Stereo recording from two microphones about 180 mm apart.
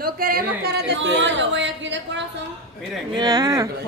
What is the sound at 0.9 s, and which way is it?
A woman's voice, 90° right.